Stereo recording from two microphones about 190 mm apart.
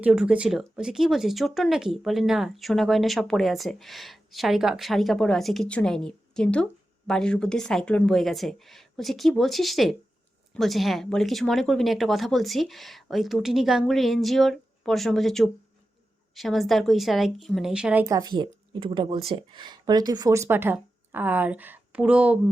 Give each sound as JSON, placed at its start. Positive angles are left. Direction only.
{"t": 0.0, "sound": "speech", "side_deg": -5}
{"t": 18.0, "sound": "speech", "side_deg": -20}